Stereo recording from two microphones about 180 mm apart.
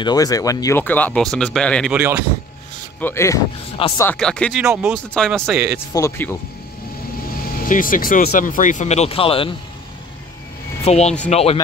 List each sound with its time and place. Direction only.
0.0 s speech: 20° left (ahead or behind); by 2.0 s 5° left (ahead or behind)
2.0 s speech: 10° right (ahead or behind)
3.0 s speech: 15° left (ahead or behind)
3.7 s speech: 30° left (ahead or behind)
4.0 s speech: 5° left (ahead or behind)
5.9 s speech: 15° left (ahead or behind)
7.6 s speech: 50° left (ahead or behind); by 9.5 s 30° left (ahead or behind)
10.8 s speech: 35° left (ahead or behind)